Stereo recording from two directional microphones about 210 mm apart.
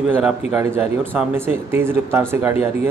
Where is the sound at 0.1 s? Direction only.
5° right (ahead or behind).